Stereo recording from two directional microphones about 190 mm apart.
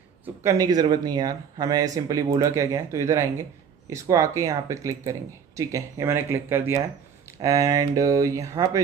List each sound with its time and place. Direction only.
0.4 s speech: 20° right (ahead or behind)